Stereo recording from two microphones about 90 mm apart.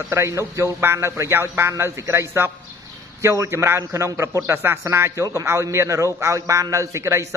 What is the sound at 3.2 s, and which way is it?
A man's voice, 35° right (ahead or behind).